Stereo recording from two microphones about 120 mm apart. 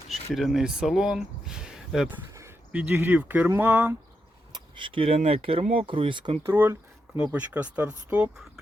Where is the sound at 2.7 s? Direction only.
10° right (ahead or behind).